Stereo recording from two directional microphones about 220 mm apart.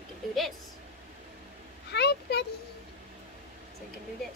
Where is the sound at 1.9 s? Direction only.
50° left (ahead or behind).